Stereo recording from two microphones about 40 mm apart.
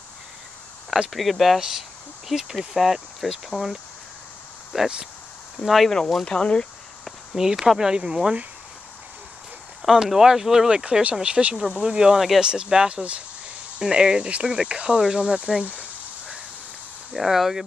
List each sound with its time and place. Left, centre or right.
1.1 s speech: centre
1.6 s speech: centre
4.7 s speech: centre
6.2 s speech: left
7.3 s speech: centre
9.8 s speech: centre
10.7 s speech: right
11.4 s speech: centre
11.8 s speech: centre
17.1 s speech: centre